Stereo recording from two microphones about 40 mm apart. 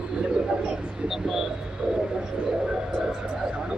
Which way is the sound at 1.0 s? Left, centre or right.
Centre.